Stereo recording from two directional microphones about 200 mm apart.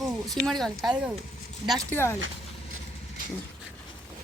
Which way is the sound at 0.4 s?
Centre (ahead or behind).